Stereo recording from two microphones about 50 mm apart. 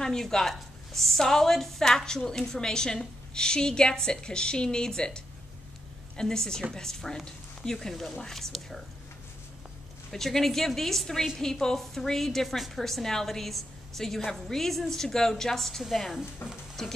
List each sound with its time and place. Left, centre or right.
0.0 s a woman's voice: centre
10.1 s a woman's voice: centre
16.4 s speech: left
16.8 s speech: centre